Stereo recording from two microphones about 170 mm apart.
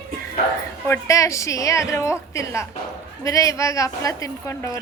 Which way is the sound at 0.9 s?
20° left (ahead or behind).